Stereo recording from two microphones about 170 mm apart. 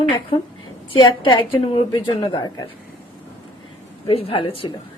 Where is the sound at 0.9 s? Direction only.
25° left (ahead or behind).